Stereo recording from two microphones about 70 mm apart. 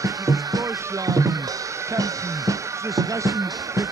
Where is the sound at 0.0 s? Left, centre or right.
Right.